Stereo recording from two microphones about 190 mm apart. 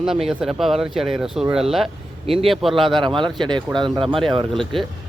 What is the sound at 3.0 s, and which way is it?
Speech, 25° right (ahead or behind).